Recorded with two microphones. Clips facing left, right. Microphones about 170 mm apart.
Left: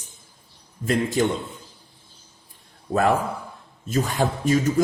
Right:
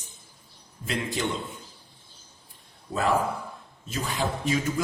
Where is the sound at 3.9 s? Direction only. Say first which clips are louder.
Left 6 dB; 45° left (ahead or behind).